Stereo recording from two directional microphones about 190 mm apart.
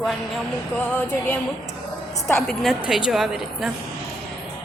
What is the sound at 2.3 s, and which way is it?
A woman's voice, centre (ahead or behind).